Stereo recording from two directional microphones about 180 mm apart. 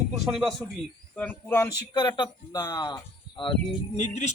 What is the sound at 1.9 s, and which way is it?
Speech, 25° left (ahead or behind).